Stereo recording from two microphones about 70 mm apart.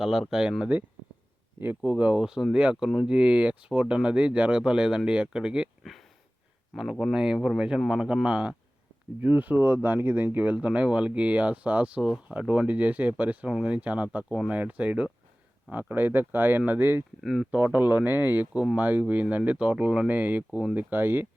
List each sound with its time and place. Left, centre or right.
0.0 s speech: centre
0.6 s speech: right
5.8 s a sound: centre
7.0 s speech: centre
9.2 s speech: right
17.2 s speech: centre
17.5 s speech: right